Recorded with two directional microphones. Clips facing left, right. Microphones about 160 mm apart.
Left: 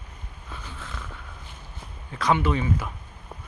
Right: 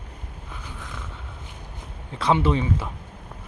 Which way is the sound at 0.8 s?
15° right (ahead or behind).